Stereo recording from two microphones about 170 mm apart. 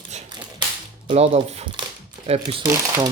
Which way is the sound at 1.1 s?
40° right (ahead or behind).